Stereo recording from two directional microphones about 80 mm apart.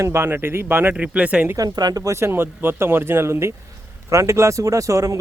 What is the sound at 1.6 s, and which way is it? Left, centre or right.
Speech, right.